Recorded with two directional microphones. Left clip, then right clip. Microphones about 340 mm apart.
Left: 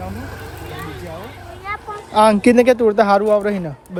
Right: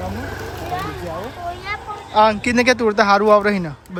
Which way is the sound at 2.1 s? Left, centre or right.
Centre.